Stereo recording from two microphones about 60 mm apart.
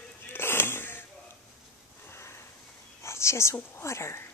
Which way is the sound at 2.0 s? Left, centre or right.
Left.